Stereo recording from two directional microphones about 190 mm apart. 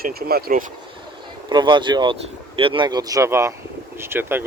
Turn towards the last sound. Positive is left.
turn(degrees=-10)  # may be behind; listen again after turning